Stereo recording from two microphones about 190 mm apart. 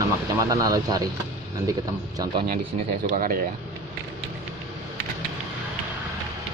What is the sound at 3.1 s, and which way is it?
Speech, 45° right (ahead or behind).